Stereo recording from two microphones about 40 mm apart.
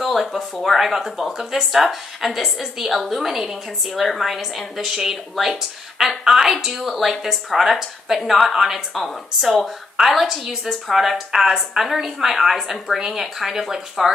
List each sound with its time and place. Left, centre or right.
0.0 s speech: centre